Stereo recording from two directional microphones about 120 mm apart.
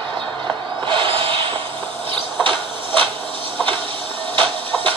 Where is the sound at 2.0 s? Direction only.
45° right (ahead or behind).